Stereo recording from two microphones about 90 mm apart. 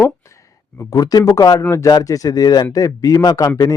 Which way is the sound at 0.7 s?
45° left (ahead or behind).